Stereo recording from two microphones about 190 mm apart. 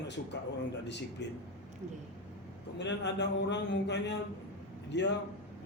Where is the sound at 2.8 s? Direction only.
65° left (ahead or behind).